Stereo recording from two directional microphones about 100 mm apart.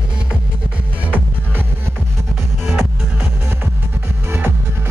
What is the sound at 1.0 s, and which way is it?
Music, 15° right (ahead or behind).